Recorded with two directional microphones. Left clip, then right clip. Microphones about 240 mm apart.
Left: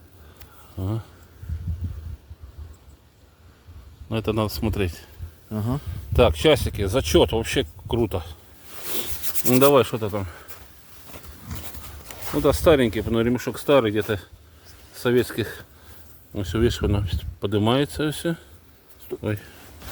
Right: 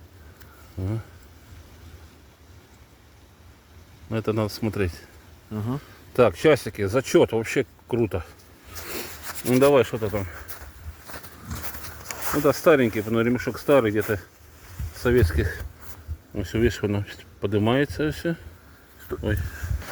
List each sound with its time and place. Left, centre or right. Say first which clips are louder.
0.8 s speech: left 1 dB; centre
4.1 s speech: left 1 dB; centre
5.5 s a sound: left 2 dB; left
6.1 s speech: left 1 dB; centre
9.5 s speech: left 1 dB; left
11.1 s wild animals: right 3 dB; centre
12.1 s a sound: right 2 dB; centre
12.4 s speech: left 1 dB; centre